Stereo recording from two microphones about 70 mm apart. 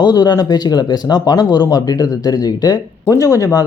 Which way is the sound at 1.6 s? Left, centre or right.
Left.